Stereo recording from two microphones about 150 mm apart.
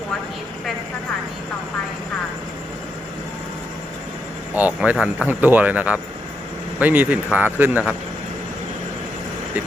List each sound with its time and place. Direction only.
4.5 s speech: 10° right (ahead or behind)